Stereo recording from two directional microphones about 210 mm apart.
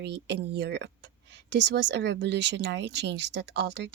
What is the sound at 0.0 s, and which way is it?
Speech, 55° right (ahead or behind).